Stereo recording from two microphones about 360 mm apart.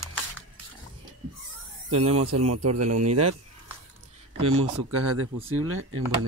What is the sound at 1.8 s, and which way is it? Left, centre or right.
Speech, right.